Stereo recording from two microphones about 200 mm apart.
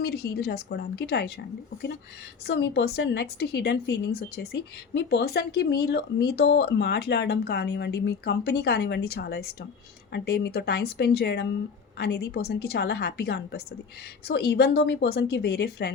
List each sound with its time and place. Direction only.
0.0 s speech: 50° left (ahead or behind)
2.5 s speech: 55° left (ahead or behind)